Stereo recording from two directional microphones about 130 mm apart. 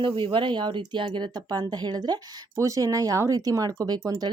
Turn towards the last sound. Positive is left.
turn(degrees=-30)  # may be behind; listen again after turning